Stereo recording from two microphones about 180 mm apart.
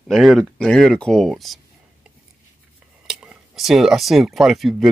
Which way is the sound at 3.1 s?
5° right (ahead or behind).